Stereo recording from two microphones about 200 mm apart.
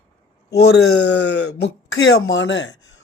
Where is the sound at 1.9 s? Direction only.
75° left (ahead or behind).